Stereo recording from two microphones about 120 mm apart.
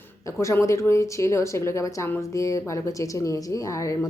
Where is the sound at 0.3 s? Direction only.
25° left (ahead or behind).